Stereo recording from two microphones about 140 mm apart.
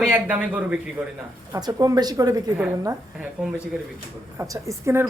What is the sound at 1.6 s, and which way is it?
Speech, 25° right (ahead or behind).